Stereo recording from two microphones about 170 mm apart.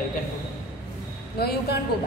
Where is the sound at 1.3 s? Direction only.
65° left (ahead or behind).